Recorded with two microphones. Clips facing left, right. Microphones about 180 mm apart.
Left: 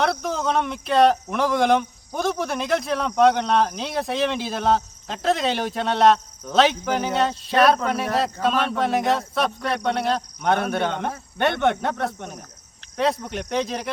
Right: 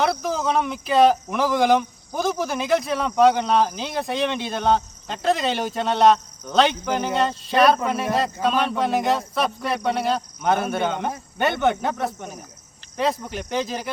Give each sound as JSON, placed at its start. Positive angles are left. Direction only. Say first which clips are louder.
{"t": 0.0, "sound": "speech", "louder": "right 1 dB", "side_deg": 0}